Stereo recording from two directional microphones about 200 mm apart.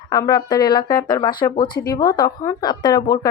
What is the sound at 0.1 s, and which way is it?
Speech, 20° left (ahead or behind).